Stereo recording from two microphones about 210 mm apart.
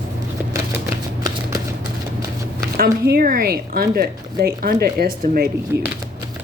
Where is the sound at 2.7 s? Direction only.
45° right (ahead or behind).